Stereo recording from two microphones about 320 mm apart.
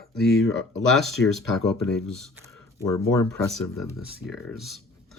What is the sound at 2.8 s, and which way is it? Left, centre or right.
Speech, centre.